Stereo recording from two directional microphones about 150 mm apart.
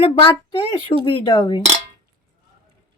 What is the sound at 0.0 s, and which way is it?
Speech, 35° left (ahead or behind).